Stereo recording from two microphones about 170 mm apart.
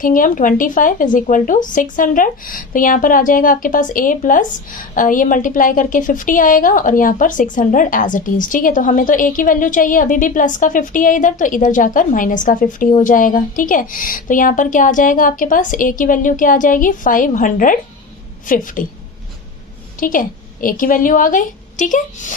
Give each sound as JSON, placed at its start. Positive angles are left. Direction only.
{"t": 0.0, "sound": "speech", "side_deg": 50}
{"t": 20.0, "sound": "a woman's voice", "side_deg": 55}